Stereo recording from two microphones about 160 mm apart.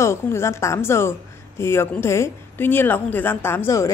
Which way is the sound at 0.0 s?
15° left (ahead or behind).